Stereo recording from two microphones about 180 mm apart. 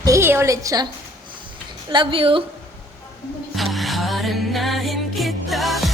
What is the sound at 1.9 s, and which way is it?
Speech, 30° right (ahead or behind).